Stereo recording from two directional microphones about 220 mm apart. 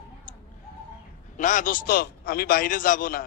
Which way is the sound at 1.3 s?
35° left (ahead or behind).